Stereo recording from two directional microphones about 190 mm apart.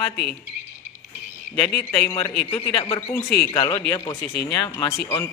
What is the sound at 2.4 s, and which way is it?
Speech, 30° left (ahead or behind).